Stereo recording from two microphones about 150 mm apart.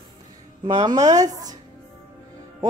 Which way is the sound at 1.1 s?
25° right (ahead or behind).